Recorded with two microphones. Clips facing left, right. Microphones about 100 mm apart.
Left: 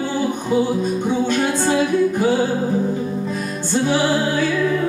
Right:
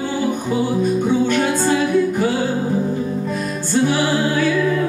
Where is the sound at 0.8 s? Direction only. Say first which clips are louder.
Right 3 dB; 20° left (ahead or behind).